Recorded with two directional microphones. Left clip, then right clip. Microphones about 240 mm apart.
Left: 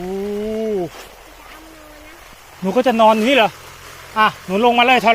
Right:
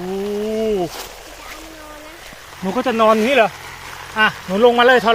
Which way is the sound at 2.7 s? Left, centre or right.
Left.